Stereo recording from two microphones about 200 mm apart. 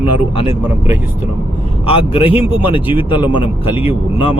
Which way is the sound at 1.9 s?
25° left (ahead or behind).